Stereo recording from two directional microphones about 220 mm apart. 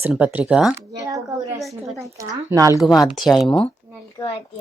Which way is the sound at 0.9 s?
15° right (ahead or behind).